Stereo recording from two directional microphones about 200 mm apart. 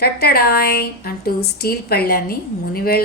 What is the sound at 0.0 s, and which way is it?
A woman's voice, 50° left (ahead or behind).